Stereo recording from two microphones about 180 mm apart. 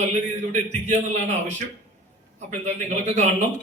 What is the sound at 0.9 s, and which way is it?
Speech, 40° right (ahead or behind).